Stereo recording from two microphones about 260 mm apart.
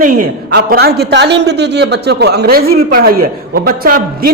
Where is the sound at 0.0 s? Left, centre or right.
Right.